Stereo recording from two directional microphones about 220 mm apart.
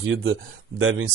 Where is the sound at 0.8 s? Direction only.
65° right (ahead or behind).